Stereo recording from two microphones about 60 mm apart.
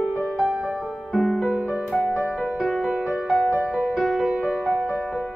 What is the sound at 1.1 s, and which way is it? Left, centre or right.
Music, centre.